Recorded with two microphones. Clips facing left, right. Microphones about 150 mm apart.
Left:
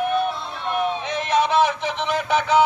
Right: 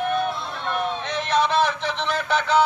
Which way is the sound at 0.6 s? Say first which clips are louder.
Left 3 dB; 10° left (ahead or behind).